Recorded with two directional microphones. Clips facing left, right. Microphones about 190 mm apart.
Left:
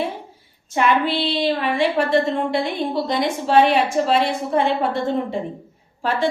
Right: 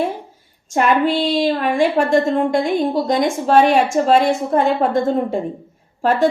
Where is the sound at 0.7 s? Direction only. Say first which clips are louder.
Right 3 dB; 45° right (ahead or behind).